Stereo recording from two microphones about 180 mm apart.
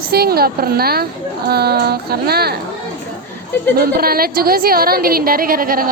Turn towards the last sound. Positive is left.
turn(degrees=-55)  # may be behind; listen again after turning